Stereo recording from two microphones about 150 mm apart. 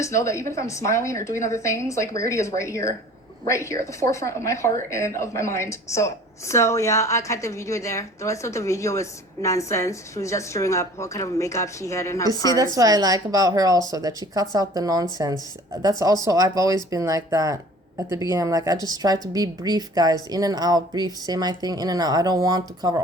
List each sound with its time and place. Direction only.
0.0 s a woman's voice: 20° left (ahead or behind)
12.5 s speech: 25° right (ahead or behind)